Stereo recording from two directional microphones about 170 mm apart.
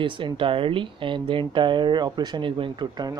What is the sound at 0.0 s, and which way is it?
Speech, 30° right (ahead or behind).